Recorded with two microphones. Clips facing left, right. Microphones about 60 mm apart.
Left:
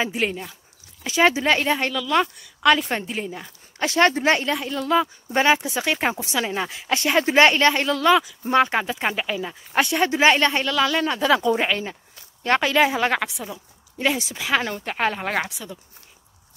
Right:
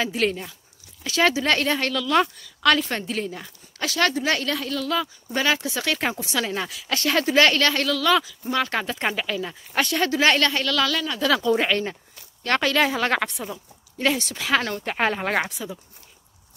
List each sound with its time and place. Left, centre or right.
0.0 s a woman's voice: centre
3.8 s a woman's voice: left; by 13.2 s centre
13.2 s a woman's voice: centre